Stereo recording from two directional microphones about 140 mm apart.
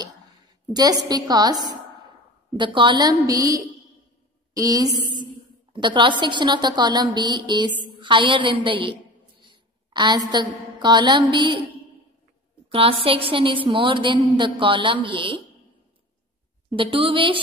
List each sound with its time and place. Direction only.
0.7 s a woman's voice: 30° right (ahead or behind)
12.6 s a woman's voice: 40° right (ahead or behind)
16.7 s a woman's voice: 40° right (ahead or behind)